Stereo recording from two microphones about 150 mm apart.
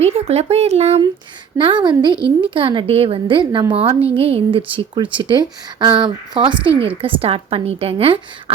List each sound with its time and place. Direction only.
0.0 s speech: 45° right (ahead or behind)
1.5 s a woman's voice: 30° right (ahead or behind)